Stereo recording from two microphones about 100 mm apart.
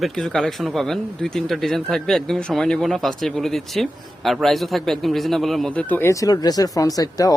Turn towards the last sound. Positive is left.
turn(degrees=40)  # may be behind; listen again after turning